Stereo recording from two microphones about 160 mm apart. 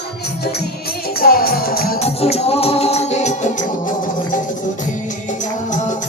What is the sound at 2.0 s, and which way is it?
Music, 40° left (ahead or behind).